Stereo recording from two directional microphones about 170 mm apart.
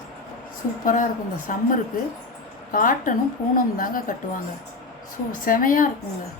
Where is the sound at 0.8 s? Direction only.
50° left (ahead or behind).